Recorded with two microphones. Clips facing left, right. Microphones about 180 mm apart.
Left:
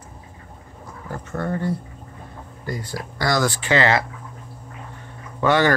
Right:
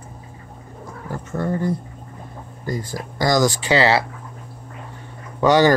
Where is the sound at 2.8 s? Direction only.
45° right (ahead or behind).